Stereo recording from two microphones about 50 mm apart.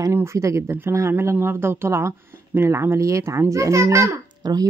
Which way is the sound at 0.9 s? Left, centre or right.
Right.